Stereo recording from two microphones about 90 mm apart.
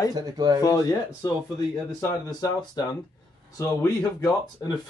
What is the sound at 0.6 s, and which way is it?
Speech, 40° left (ahead or behind).